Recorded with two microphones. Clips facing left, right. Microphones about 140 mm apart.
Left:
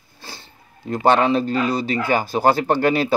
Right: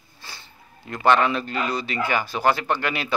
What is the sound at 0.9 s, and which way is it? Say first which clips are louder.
Speech: left 3 dB; 35° left (ahead or behind).